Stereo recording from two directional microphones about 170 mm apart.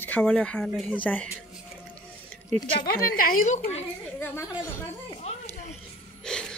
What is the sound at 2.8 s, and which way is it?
A woman's voice, 60° left (ahead or behind).